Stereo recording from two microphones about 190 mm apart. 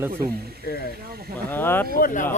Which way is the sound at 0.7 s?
55° left (ahead or behind).